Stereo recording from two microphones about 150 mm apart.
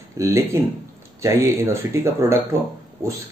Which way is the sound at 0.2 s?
15° right (ahead or behind).